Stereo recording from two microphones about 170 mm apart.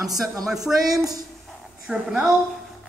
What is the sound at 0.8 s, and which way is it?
Speech, 20° right (ahead or behind).